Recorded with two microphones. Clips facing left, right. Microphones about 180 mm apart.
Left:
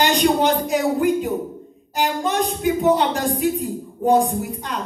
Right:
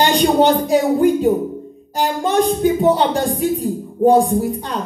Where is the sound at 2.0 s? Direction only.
30° right (ahead or behind).